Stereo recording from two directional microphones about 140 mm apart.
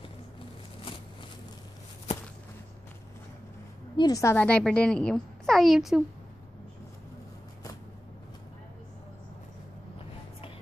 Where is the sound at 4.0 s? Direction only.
25° left (ahead or behind).